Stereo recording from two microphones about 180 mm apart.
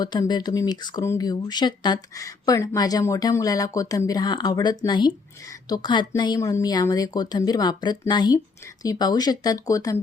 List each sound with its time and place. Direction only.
0.0 s a woman's voice: 25° left (ahead or behind)